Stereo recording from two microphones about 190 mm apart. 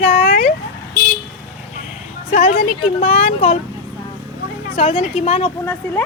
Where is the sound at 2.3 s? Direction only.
45° left (ahead or behind).